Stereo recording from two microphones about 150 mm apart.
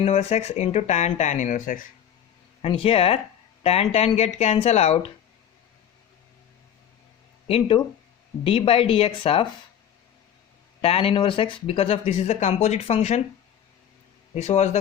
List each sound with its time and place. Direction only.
0.0 s speech: 45° left (ahead or behind); by 1.9 s 65° left (ahead or behind)
2.6 s speech: 40° left (ahead or behind)
7.4 s speech: 40° left (ahead or behind)
10.8 s speech: 40° left (ahead or behind)
14.3 s speech: 45° left (ahead or behind)